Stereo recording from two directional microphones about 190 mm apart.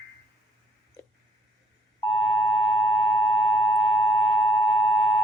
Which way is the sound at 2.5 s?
10° left (ahead or behind).